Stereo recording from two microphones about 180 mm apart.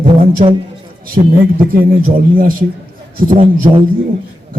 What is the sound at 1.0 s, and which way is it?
Speech, 50° right (ahead or behind).